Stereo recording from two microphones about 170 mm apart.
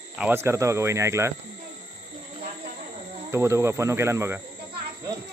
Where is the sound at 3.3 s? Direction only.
15° right (ahead or behind).